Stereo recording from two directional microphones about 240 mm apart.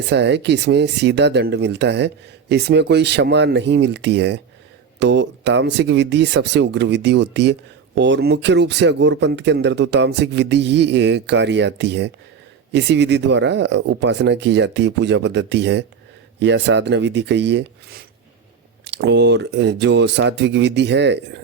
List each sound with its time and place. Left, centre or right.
0.1 s speech: right